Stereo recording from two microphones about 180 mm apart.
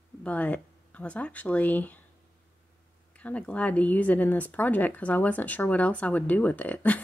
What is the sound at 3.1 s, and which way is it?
Speech, 10° left (ahead or behind).